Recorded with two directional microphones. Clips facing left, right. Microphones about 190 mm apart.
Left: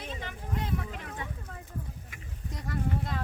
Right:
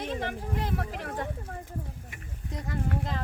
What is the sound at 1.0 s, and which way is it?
Speech, 50° right (ahead or behind).